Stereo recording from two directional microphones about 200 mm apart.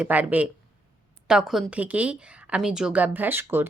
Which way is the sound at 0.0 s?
10° right (ahead or behind).